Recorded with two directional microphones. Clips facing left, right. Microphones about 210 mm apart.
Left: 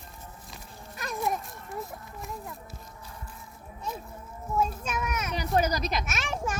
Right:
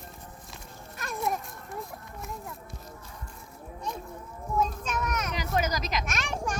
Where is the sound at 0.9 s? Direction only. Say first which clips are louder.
Left 1 dB; centre (ahead or behind).